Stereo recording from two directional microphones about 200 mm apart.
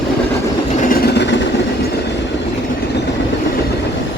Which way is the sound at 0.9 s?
60° left (ahead or behind).